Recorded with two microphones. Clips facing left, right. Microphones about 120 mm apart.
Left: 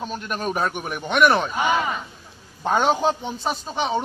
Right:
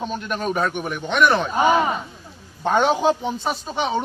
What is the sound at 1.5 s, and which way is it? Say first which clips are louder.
Speech: right 4 dB; 35° right (ahead or behind).